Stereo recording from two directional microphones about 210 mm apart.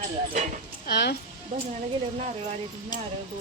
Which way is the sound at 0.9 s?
50° left (ahead or behind).